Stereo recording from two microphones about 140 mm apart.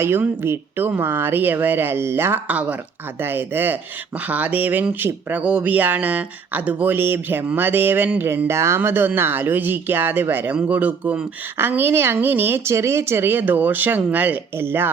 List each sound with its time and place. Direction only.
0.0 s speech: 15° right (ahead or behind)